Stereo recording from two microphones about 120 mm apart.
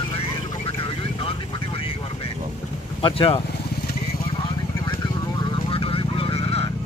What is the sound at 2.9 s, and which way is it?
Speech, 50° left (ahead or behind).